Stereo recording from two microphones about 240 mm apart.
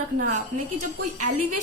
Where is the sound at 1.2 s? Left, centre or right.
Right.